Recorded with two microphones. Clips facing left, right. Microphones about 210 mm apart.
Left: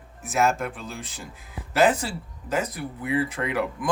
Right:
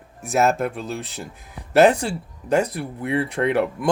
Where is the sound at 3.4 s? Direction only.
40° right (ahead or behind).